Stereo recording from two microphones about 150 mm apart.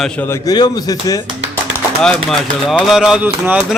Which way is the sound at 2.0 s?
5° left (ahead or behind).